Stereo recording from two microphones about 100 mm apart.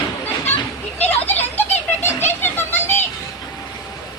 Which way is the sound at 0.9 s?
20° left (ahead or behind).